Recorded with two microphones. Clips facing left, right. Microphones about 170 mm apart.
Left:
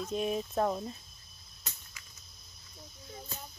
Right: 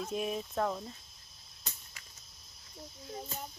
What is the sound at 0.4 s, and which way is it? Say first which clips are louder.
Speech: left 3 dB; 15° left (ahead or behind).